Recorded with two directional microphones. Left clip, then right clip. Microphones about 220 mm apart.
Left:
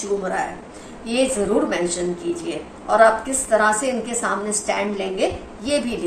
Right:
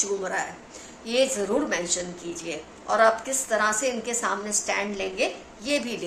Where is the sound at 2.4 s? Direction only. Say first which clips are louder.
Left 1 dB; 40° right (ahead or behind).